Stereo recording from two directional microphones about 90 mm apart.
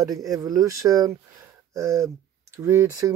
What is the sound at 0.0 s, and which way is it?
Speech, 40° right (ahead or behind).